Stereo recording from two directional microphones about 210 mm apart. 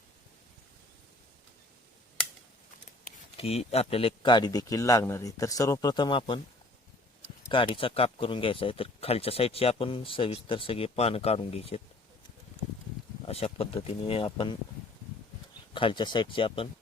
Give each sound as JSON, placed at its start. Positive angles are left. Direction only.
{"t": 3.3, "sound": "speech", "side_deg": 30}
{"t": 7.8, "sound": "speech", "side_deg": 25}
{"t": 13.2, "sound": "speech", "side_deg": 30}
{"t": 15.7, "sound": "speech", "side_deg": 25}